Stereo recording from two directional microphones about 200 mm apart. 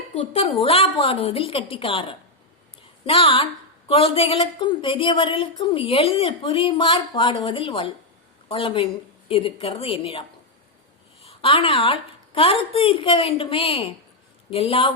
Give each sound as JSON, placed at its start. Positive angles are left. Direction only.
{"t": 0.1, "sound": "a woman's voice", "side_deg": 30}